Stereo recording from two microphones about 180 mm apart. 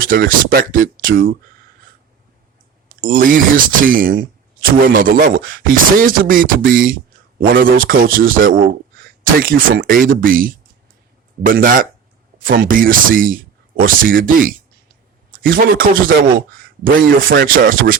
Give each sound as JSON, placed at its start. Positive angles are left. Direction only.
{"t": 0.0, "sound": "speech", "side_deg": -50}
{"t": 3.0, "sound": "speech", "side_deg": -50}